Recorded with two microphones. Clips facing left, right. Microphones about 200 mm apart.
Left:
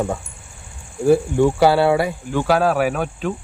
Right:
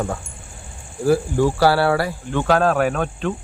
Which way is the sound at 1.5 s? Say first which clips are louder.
Left 2 dB; 20° left (ahead or behind).